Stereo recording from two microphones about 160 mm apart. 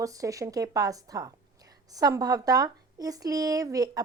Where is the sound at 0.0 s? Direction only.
20° right (ahead or behind).